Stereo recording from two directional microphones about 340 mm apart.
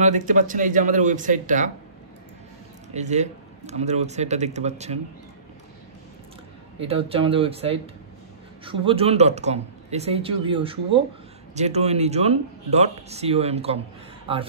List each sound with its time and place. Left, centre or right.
0.0 s speech: right
2.9 s speech: centre
6.8 s speech: centre